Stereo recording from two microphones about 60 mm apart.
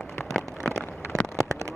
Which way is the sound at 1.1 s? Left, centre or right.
Left.